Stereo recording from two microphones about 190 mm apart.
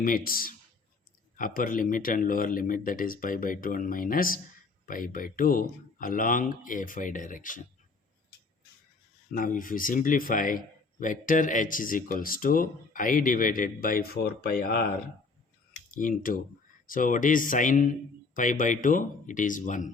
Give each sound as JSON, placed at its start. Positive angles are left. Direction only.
{"t": 0.0, "sound": "speech", "side_deg": 50}
{"t": 9.3, "sound": "speech", "side_deg": 45}
{"t": 15.9, "sound": "speech", "side_deg": 45}